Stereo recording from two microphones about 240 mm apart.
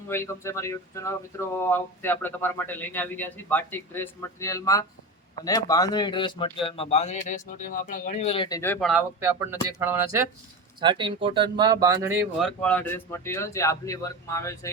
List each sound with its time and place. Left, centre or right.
0.1 s speech: centre
8.9 s speech: centre
12.6 s speech: centre